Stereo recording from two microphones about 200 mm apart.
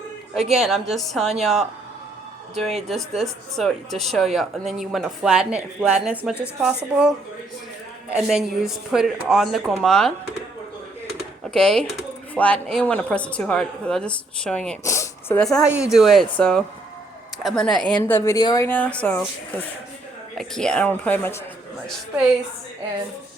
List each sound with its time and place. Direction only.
0.6 s a woman's voice: centre (ahead or behind)
3.6 s a woman's voice: centre (ahead or behind)
8.1 s a woman's voice: 5° right (ahead or behind)
11.4 s a woman's voice: 5° left (ahead or behind)